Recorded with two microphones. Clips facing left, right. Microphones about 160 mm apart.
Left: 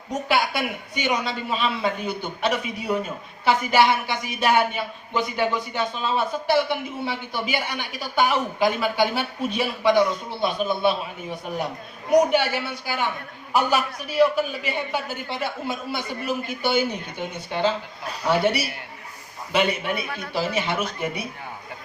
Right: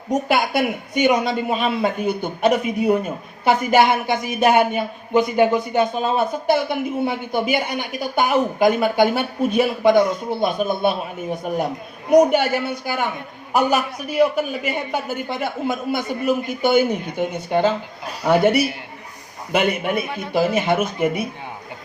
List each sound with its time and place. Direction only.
0.1 s speech: 50° right (ahead or behind)